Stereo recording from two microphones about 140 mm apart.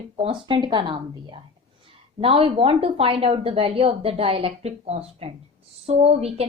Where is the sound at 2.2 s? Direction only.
40° right (ahead or behind).